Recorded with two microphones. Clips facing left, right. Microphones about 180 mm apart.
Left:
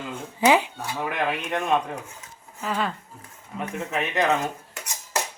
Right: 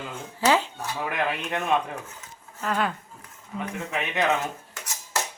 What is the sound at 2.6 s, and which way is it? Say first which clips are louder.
Speech: right 1 dB; centre (ahead or behind).